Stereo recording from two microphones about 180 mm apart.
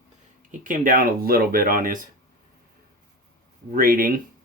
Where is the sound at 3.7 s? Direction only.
50° right (ahead or behind).